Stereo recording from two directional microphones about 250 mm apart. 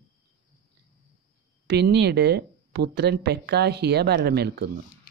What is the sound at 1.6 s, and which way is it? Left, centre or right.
Speech, right.